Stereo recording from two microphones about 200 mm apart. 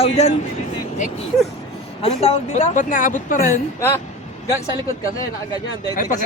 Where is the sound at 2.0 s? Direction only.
30° left (ahead or behind).